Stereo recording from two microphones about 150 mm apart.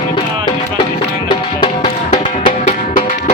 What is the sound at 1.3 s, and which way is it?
Music, 30° left (ahead or behind).